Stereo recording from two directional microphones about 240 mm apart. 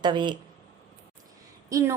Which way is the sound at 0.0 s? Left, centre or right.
Centre.